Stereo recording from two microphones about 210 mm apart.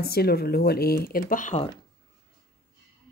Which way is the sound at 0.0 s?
50° left (ahead or behind).